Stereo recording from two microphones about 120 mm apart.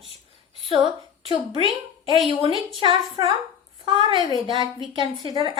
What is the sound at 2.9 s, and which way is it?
A woman's voice, 40° right (ahead or behind).